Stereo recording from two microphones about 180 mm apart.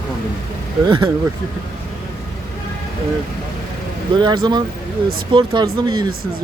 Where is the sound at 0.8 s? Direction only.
25° right (ahead or behind).